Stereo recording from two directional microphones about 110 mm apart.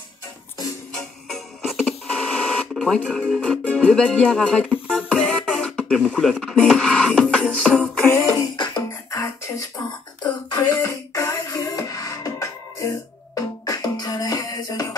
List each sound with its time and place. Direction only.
0.9 s printer: centre (ahead or behind)
2.7 s speech: centre (ahead or behind)
8.3 s music: 40° left (ahead or behind)
9.1 s music: 25° left (ahead or behind)